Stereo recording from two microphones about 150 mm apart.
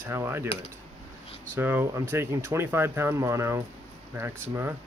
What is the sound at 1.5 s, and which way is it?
Speech, 15° right (ahead or behind).